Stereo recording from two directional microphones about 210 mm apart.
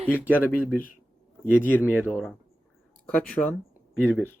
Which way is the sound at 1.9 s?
5° right (ahead or behind).